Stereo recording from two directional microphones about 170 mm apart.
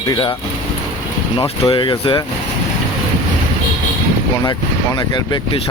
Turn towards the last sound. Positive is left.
turn(degrees=25)  # may be behind; listen again after turning